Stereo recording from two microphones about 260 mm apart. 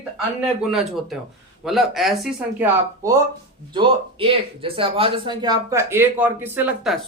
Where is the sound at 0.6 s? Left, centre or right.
Centre.